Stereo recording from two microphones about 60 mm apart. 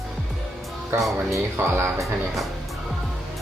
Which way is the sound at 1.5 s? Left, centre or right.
Right.